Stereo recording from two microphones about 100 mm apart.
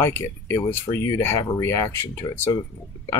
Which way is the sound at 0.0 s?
25° left (ahead or behind).